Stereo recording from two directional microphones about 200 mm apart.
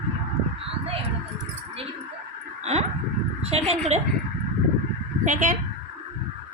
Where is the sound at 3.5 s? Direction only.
30° right (ahead or behind).